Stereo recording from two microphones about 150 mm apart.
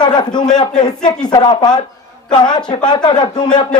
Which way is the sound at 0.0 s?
30° left (ahead or behind).